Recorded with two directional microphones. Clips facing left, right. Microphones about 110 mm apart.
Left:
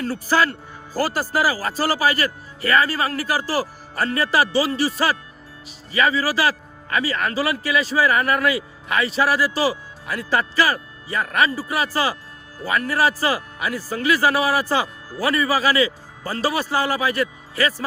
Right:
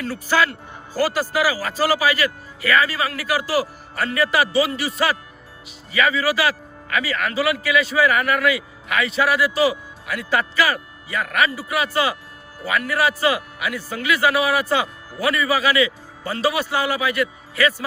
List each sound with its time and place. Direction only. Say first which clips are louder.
0.0 s a man's voice: even; 40° left (ahead or behind)